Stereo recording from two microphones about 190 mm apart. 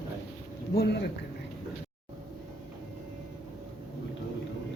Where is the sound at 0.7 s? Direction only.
60° left (ahead or behind).